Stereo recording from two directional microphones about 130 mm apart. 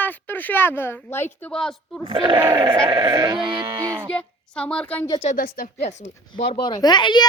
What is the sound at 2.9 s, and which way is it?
Sheep, 30° right (ahead or behind).